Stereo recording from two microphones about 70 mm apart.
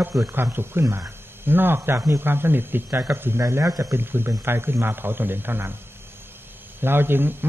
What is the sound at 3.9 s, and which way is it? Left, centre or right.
Speech, right.